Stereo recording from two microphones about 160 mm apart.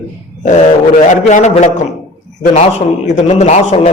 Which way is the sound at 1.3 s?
50° left (ahead or behind).